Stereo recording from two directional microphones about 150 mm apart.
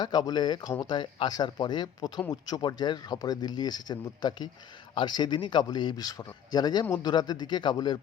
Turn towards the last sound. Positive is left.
turn(degrees=30)  # may be behind; listen again after turning